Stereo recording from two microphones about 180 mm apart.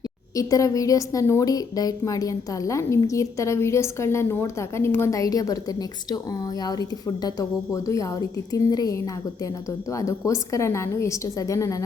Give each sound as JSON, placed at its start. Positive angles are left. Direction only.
{"t": 0.3, "sound": "a woman's voice", "side_deg": 20}